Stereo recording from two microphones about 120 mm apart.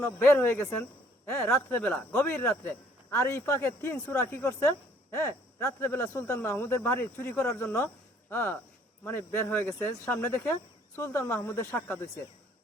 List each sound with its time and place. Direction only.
0.0 s speech: 20° left (ahead or behind)